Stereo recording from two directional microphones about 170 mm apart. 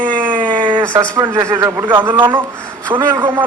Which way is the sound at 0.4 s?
10° left (ahead or behind).